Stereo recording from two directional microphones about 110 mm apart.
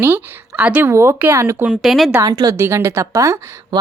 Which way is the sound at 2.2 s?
35° right (ahead or behind).